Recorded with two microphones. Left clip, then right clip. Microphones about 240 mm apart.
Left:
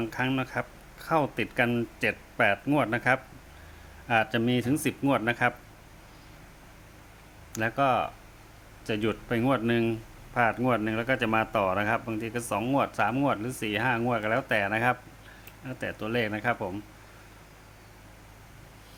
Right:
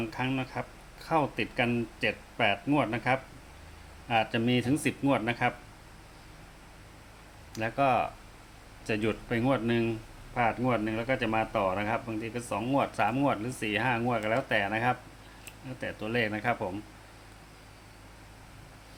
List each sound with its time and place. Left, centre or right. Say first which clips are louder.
0.0 s speech: left 3 dB; centre
7.5 s speech: left 1 dB; centre